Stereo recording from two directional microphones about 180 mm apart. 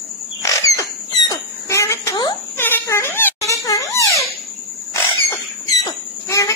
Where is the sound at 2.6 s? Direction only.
10° left (ahead or behind).